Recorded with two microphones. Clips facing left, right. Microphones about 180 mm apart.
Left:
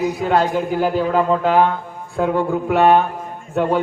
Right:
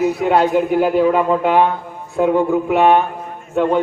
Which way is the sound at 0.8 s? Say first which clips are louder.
Right 4 dB; 30° left (ahead or behind).